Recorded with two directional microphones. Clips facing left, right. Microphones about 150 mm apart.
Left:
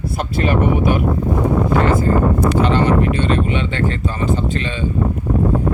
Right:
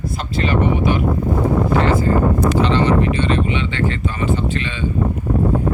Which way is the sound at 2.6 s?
50° left (ahead or behind).